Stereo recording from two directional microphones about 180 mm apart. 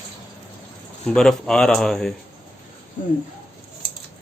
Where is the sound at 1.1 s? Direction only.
5° left (ahead or behind).